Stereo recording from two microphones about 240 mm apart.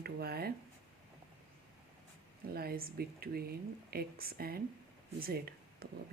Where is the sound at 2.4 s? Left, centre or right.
Right.